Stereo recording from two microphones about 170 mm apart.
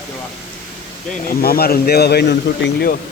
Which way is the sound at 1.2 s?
65° left (ahead or behind).